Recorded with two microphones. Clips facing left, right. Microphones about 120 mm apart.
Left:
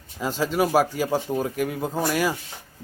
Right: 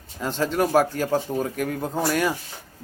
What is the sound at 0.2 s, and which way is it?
A man's voice, 5° left (ahead or behind).